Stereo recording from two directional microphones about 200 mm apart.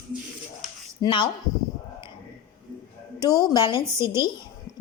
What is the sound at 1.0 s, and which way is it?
Speech, 25° left (ahead or behind).